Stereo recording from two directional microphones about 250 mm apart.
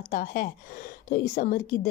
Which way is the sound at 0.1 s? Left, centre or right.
Left.